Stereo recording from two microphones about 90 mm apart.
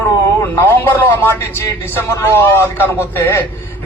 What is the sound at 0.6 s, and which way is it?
A man's voice, 25° left (ahead or behind).